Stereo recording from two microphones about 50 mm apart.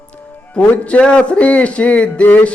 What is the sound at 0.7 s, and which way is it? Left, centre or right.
Speech, left.